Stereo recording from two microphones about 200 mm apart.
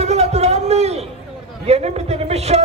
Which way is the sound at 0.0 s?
35° right (ahead or behind).